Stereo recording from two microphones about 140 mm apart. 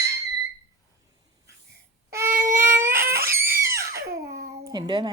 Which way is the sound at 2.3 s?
70° right (ahead or behind).